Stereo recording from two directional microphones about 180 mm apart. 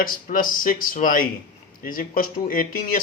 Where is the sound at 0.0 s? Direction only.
50° left (ahead or behind).